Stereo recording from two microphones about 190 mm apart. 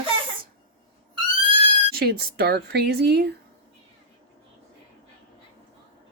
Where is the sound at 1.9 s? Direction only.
55° right (ahead or behind).